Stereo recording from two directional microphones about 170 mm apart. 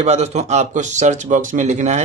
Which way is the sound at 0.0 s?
40° right (ahead or behind).